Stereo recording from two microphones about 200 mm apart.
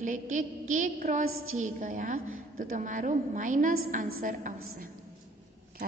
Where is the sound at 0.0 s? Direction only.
40° right (ahead or behind).